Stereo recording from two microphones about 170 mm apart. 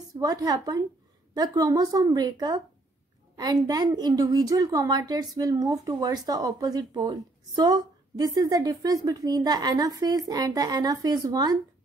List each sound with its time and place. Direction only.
0.1 s a woman's voice: 20° right (ahead or behind)